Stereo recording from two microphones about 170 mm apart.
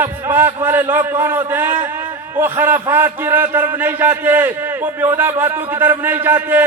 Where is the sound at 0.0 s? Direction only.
10° right (ahead or behind).